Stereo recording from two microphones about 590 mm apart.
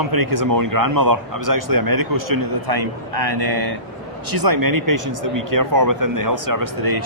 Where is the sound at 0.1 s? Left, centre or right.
Right.